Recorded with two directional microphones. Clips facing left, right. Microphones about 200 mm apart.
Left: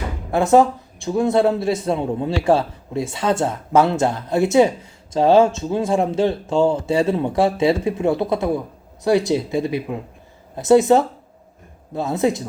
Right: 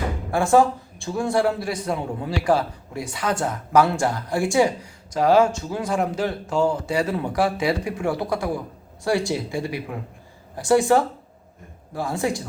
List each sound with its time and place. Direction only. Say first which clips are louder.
0.3 s a man's voice: left 3 dB; 20° left (ahead or behind)